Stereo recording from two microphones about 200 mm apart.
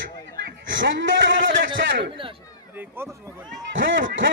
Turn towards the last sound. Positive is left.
turn(degrees=-70)  # may be behind; listen again after turning